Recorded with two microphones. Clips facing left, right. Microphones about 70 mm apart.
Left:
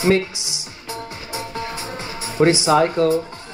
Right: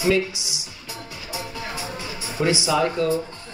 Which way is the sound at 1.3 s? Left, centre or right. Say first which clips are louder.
Left 3 dB; left.